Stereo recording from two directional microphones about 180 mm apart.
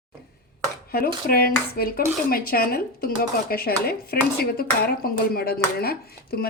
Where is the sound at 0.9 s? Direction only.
55° left (ahead or behind).